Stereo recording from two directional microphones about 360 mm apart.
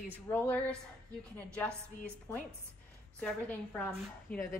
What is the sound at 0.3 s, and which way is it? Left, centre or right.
Speech, centre.